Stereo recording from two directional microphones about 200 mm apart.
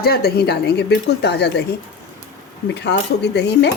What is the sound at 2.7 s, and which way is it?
Speech, 55° left (ahead or behind).